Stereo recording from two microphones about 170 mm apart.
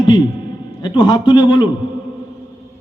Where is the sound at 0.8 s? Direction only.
25° left (ahead or behind).